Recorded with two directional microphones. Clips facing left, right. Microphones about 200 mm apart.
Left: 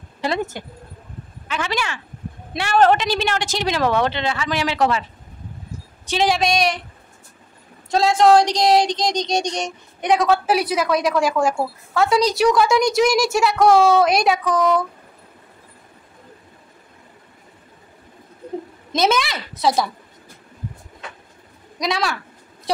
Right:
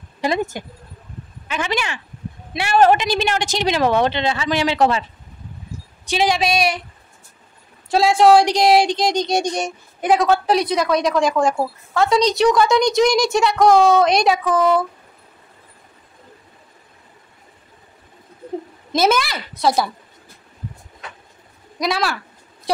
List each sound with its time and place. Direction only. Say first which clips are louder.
0.2 s speech: right 2 dB; 15° right (ahead or behind)
6.2 s a woman's voice: even; centre (ahead or behind)
7.9 s a woman's voice: right 1 dB; 10° right (ahead or behind)
18.9 s a woman's voice: right 2 dB; centre (ahead or behind)
21.7 s a woman's voice: right 1 dB; 5° right (ahead or behind)